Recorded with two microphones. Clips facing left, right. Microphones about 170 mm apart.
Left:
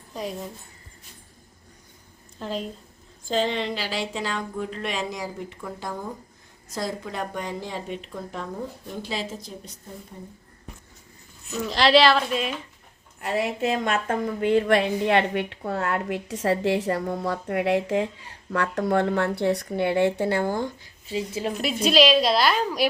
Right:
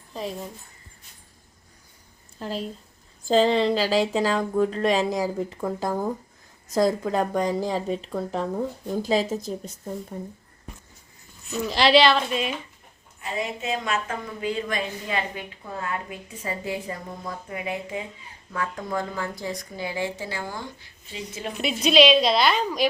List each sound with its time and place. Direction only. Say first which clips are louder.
0.1 s speech: even; centre (ahead or behind)
2.4 s a woman's voice: even; 5° right (ahead or behind)
3.2 s a woman's voice: right 6 dB; 35° right (ahead or behind)
11.7 s a woman's voice: even; centre (ahead or behind)
13.1 s a woman's voice: left 4 dB; 65° left (ahead or behind); by 20.7 s 50° left (ahead or behind)
21.1 s a woman's voice: left 6 dB; 35° left (ahead or behind)
21.8 s a woman's voice: right 1 dB; centre (ahead or behind)